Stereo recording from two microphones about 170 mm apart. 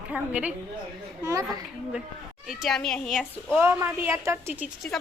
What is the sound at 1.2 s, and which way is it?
Speech, 20° right (ahead or behind).